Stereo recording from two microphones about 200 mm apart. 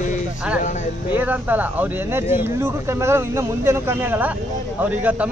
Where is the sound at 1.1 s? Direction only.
10° right (ahead or behind).